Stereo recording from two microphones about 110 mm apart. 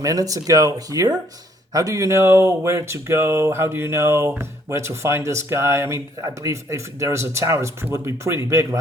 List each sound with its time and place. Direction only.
0.0 s speech: 30° right (ahead or behind)